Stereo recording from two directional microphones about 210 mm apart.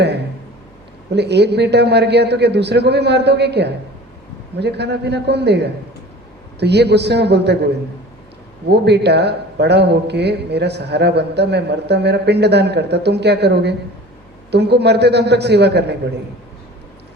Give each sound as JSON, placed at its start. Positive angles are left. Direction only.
{"t": 1.1, "sound": "a man's voice", "side_deg": -55}
{"t": 8.7, "sound": "a man's voice", "side_deg": -50}